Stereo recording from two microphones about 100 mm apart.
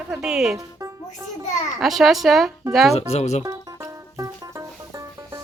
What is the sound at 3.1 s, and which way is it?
Speech, 90° left.